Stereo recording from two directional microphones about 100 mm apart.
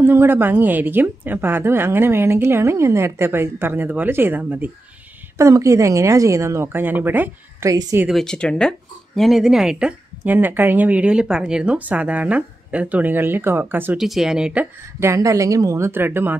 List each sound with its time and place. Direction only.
0.0 s a woman's voice: 20° right (ahead or behind)
5.4 s a woman's voice: 30° right (ahead or behind)
7.6 s speech: 30° right (ahead or behind)
8.1 s speech: 5° left (ahead or behind); by 13.9 s 20° right (ahead or behind)
13.9 s speech: 5° right (ahead or behind)
15.0 s a woman's voice: 30° right (ahead or behind)